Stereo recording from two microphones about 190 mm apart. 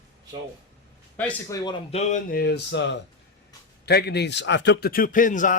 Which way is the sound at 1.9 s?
35° left (ahead or behind).